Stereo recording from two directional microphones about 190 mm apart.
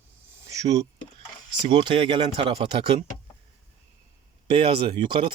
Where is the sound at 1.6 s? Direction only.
25° right (ahead or behind).